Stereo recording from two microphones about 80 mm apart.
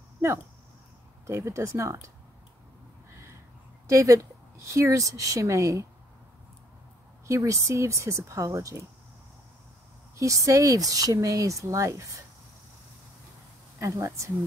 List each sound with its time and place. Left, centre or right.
0.2 s speech: right
3.8 s speech: right
7.2 s speech: right
10.1 s speech: right
13.7 s speech: right